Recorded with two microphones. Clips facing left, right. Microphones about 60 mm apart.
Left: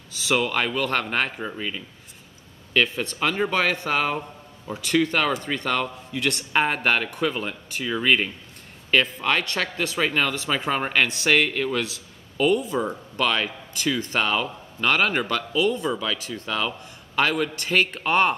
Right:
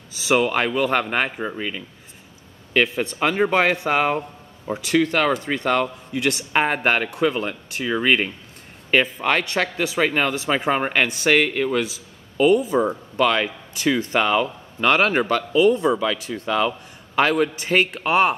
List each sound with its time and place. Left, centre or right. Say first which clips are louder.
0.2 s speech: right 4 dB; centre
4.8 s speech: right 3 dB; centre